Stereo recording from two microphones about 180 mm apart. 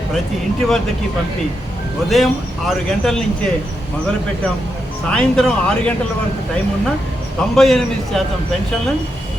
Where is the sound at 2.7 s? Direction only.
5° left (ahead or behind).